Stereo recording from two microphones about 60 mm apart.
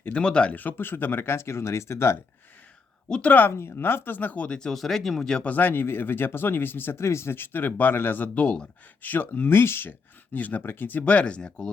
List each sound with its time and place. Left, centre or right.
0.1 s speech: centre
0.5 s speech: left
3.1 s speech: centre
3.5 s speech: left; by 4.7 s centre
4.7 s speech: centre
5.4 s speech: left
10.3 s speech: left
10.6 s speech: left; by 11.5 s centre